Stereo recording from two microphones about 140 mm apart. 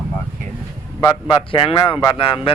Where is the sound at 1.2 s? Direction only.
40° left (ahead or behind).